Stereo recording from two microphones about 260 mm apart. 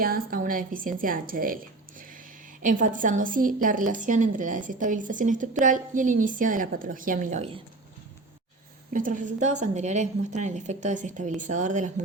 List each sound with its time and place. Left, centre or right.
0.0 s a woman's voice: right
8.9 s a woman's voice: right